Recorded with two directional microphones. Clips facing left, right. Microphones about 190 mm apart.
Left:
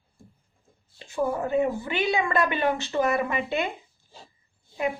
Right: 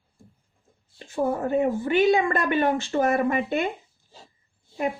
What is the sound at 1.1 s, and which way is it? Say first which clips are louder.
A woman's voice: right 1 dB; 45° right (ahead or behind).